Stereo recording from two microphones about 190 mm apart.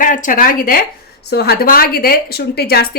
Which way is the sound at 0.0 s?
45° left (ahead or behind).